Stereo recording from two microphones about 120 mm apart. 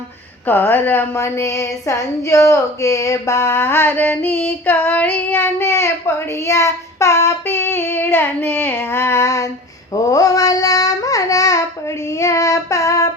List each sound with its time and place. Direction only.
0.4 s speech: 15° left (ahead or behind)